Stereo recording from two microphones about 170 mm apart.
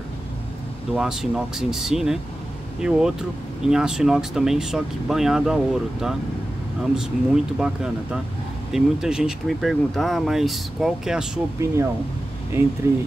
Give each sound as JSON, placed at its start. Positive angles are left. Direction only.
{"t": 0.9, "sound": "speech", "side_deg": 0}
{"t": 7.5, "sound": "speech", "side_deg": -5}
{"t": 11.6, "sound": "speech", "side_deg": -15}